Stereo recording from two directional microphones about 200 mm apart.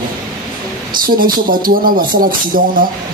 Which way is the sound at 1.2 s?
45° right (ahead or behind).